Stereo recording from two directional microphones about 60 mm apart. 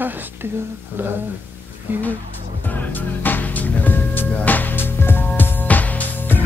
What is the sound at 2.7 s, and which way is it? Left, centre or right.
Music, left.